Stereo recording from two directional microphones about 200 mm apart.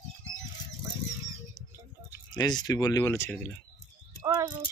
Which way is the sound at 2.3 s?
20° left (ahead or behind).